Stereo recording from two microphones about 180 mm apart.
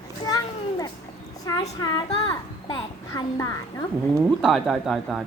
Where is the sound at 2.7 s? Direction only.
20° left (ahead or behind).